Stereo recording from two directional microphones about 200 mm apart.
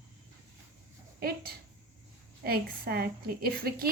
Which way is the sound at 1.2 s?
50° right (ahead or behind).